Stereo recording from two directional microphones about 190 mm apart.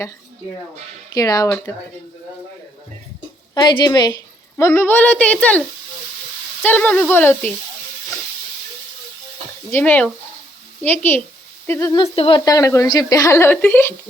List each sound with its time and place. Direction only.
1.1 s speech: 20° left (ahead or behind)
3.5 s a woman's voice: 25° left (ahead or behind)
9.7 s a woman's voice: 10° left (ahead or behind)
11.9 s a woman's voice: 30° left (ahead or behind); by 13.9 s 10° left (ahead or behind)